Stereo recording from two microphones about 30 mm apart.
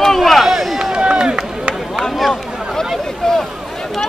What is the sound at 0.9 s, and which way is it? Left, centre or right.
Run, right.